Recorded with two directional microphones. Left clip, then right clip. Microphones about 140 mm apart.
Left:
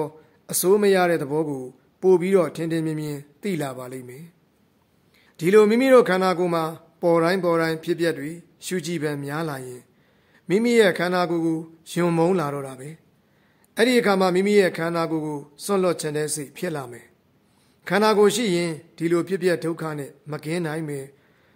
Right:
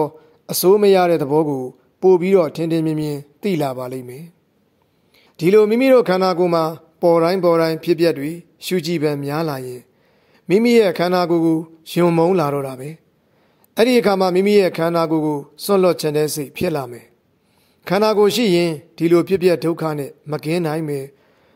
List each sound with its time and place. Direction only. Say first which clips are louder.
0.0 s speech: right 8 dB; 40° right (ahead or behind)
5.4 s speech: right 3 dB; 40° right (ahead or behind)